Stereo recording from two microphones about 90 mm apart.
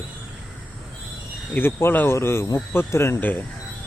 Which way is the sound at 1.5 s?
25° left (ahead or behind).